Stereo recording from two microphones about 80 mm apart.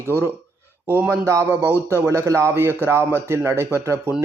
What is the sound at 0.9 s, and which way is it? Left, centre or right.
A man's voice, right.